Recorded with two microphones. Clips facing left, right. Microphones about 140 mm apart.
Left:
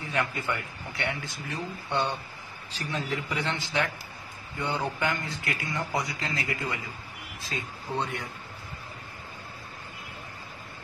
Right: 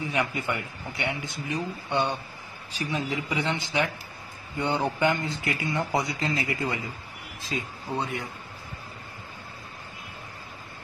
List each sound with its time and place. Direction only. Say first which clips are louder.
0.0 s a man's voice: right 2 dB; 15° right (ahead or behind)
7.9 s speech: right 1 dB; 5° right (ahead or behind)